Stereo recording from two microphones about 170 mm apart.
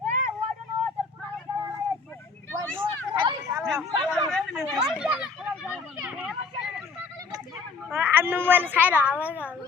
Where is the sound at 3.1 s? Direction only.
20° right (ahead or behind).